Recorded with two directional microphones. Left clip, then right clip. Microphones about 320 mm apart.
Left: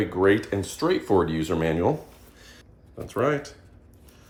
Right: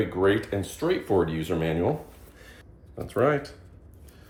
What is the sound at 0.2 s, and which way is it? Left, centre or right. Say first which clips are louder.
Speech: left 3 dB; left.